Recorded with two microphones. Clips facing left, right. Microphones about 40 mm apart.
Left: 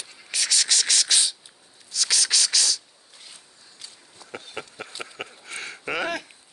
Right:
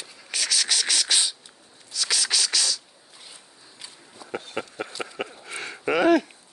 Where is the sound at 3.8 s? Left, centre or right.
Centre.